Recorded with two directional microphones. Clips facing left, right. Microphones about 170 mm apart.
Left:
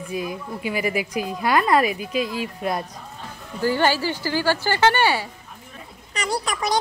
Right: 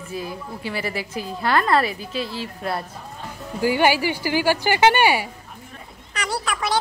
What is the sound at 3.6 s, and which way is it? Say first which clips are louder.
A woman's voice: right 2 dB; 15° right (ahead or behind).